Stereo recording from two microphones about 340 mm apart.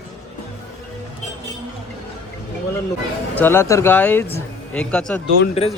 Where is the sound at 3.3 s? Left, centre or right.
Centre.